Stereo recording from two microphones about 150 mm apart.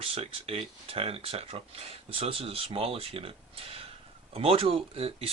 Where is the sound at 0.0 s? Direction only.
40° right (ahead or behind).